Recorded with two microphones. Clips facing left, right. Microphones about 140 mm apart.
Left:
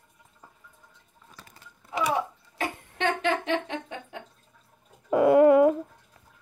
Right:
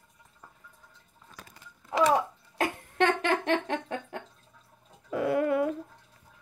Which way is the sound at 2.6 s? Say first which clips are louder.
Right 3 dB; 45° right (ahead or behind).